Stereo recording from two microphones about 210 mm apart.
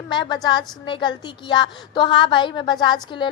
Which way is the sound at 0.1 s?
20° left (ahead or behind).